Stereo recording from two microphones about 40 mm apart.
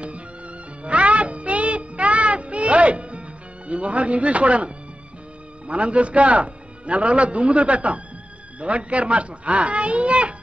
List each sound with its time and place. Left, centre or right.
0.8 s music: right
5.7 s a man's voice: right